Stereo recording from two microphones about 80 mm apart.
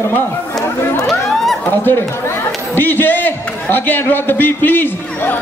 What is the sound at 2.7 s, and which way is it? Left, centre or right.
A man's voice, left.